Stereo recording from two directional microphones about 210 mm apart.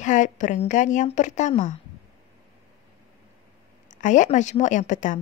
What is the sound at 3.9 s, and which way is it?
Speech, 35° left (ahead or behind).